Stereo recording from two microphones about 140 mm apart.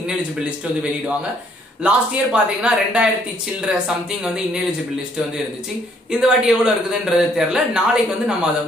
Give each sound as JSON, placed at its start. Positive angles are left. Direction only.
{"t": 1.8, "sound": "speech", "side_deg": -10}
{"t": 6.1, "sound": "a man's voice", "side_deg": -5}